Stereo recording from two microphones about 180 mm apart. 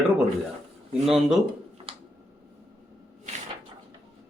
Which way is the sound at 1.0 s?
Centre (ahead or behind).